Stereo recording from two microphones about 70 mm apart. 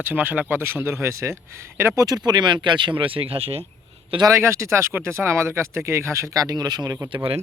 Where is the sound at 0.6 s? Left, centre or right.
Right.